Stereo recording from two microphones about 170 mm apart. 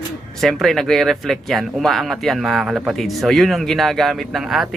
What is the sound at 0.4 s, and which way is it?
Speech, centre (ahead or behind).